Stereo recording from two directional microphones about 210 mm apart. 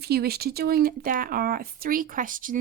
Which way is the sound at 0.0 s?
50° right (ahead or behind).